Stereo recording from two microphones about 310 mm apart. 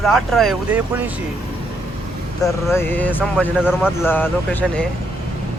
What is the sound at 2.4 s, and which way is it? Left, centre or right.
Speech, centre.